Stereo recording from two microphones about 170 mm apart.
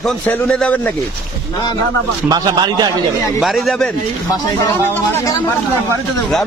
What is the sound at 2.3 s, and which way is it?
Speech, 25° right (ahead or behind).